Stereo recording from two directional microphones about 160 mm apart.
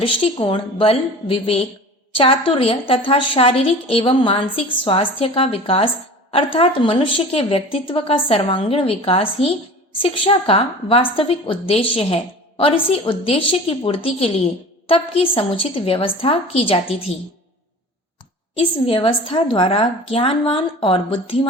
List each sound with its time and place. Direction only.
0.0 s a woman's voice: 35° left (ahead or behind)
18.5 s a woman's voice: 35° left (ahead or behind)